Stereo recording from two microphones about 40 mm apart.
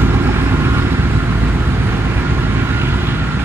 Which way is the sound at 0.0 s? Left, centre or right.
Right.